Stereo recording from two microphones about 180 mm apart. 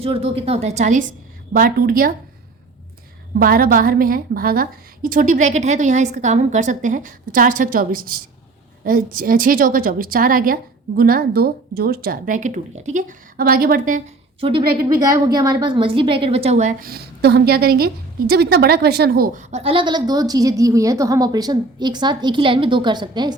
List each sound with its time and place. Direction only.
0.0 s a woman's voice: 30° right (ahead or behind)
1.5 s a woman's voice: 55° right (ahead or behind)
3.3 s a woman's voice: 55° right (ahead or behind)
14.4 s a woman's voice: 30° right (ahead or behind)
16.9 s a woman's voice: 65° right (ahead or behind); by 23.3 s 25° right (ahead or behind)